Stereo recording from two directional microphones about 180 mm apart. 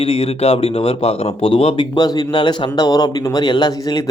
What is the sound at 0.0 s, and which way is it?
Speech, 35° left (ahead or behind).